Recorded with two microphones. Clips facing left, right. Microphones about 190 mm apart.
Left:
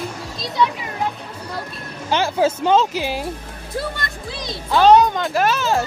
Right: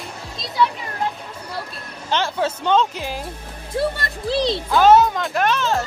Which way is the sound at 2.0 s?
10° left (ahead or behind).